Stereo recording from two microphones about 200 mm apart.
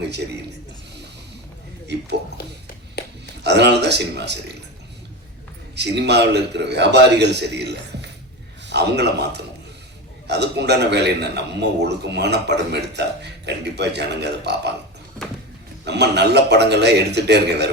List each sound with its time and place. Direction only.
2.4 s speech: 50° left (ahead or behind)
3.4 s a man's voice: 55° right (ahead or behind)
5.7 s a man's voice: 60° right (ahead or behind)
15.8 s a man's voice: 55° right (ahead or behind)